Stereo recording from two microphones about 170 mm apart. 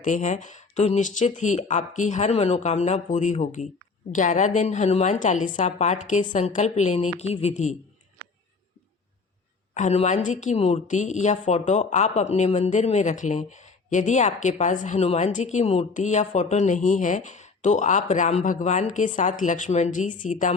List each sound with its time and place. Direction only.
0.0 s a woman's voice: 45° left (ahead or behind)
9.7 s a woman's voice: 40° left (ahead or behind)